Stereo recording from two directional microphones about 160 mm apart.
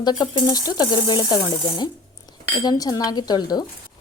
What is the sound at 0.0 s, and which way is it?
A woman's voice, 30° left (ahead or behind).